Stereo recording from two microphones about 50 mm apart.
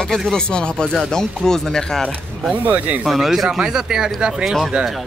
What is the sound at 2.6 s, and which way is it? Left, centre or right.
Speech, right.